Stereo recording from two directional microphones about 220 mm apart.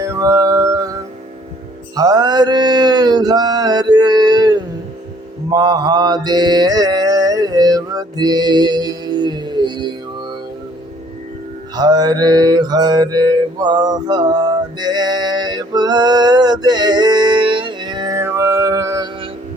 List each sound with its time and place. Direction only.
0.0 s music: 15° right (ahead or behind)
2.0 s mantra: 15° right (ahead or behind)
11.7 s mantra: 20° right (ahead or behind)
14.8 s a sound: 20° right (ahead or behind)